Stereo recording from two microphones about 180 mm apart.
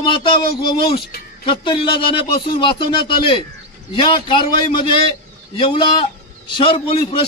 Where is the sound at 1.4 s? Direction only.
25° left (ahead or behind).